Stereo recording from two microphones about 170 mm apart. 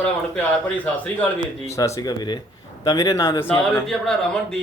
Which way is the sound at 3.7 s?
5° left (ahead or behind).